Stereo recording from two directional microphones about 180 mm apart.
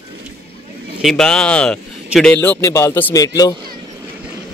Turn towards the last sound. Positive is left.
turn(degrees=20)  # may be behind; listen again after turning